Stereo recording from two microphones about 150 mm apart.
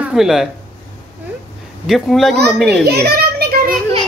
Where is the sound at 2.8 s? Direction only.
90° right.